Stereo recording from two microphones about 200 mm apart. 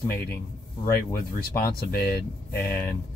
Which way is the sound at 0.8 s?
50° left (ahead or behind).